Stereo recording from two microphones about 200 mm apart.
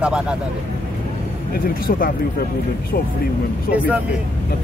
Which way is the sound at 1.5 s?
45° left (ahead or behind).